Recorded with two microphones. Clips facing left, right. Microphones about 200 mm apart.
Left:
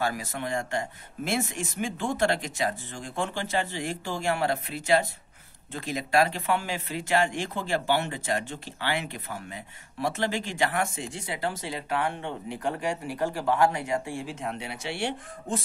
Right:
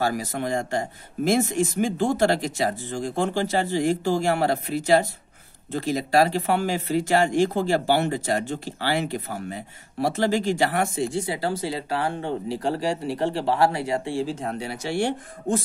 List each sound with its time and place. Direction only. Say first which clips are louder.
0.0 s speech: right 5 dB; 40° right (ahead or behind)